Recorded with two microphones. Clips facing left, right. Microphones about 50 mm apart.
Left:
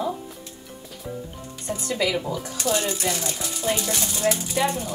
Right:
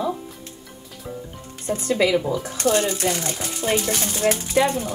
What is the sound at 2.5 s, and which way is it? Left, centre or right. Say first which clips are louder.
Speech: right 4 dB; right.